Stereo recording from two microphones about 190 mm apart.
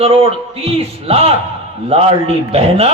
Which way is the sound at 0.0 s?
30° right (ahead or behind).